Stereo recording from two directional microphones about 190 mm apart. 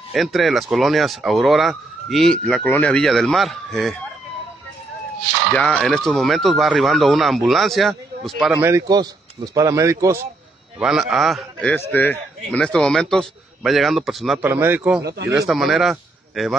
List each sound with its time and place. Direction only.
0.1 s speech: centre (ahead or behind)
5.5 s speech: 5° left (ahead or behind)
8.5 s a man's voice: 15° right (ahead or behind)
10.8 s speech: centre (ahead or behind)
14.5 s a man's voice: 10° right (ahead or behind)